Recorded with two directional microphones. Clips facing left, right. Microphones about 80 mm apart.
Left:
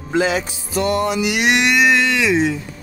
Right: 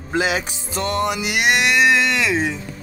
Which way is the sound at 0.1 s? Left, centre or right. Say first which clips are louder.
Left 3 dB; centre.